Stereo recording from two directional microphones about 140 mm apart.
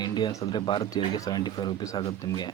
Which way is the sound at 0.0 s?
30° left (ahead or behind).